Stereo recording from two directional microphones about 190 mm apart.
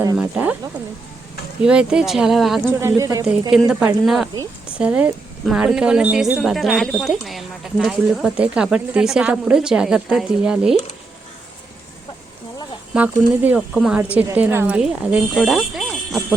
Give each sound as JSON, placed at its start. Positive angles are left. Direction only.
{"t": 0.2, "sound": "a woman's voice", "side_deg": -5}
{"t": 1.6, "sound": "speech", "side_deg": -5}
{"t": 2.8, "sound": "a woman's voice", "side_deg": -15}
{"t": 3.5, "sound": "speech", "side_deg": -5}
{"t": 12.9, "sound": "speech", "side_deg": -10}